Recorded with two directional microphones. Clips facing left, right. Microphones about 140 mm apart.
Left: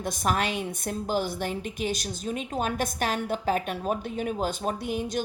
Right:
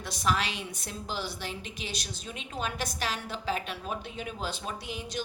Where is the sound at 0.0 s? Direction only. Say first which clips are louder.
Left 3 dB; 50° left (ahead or behind).